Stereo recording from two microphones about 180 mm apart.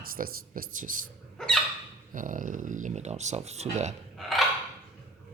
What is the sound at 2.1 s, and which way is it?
Speech, 45° right (ahead or behind).